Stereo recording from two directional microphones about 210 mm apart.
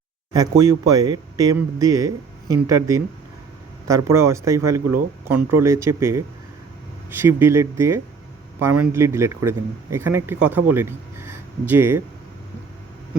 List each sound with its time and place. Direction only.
0.3 s a man's voice: 20° right (ahead or behind)